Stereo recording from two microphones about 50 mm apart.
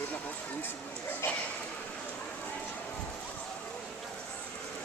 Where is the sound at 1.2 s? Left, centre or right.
Left.